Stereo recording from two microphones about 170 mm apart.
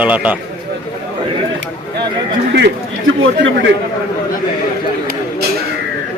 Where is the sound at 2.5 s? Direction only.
90° right.